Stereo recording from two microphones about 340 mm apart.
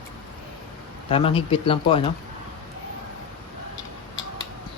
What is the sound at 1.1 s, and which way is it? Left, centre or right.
Speech, centre.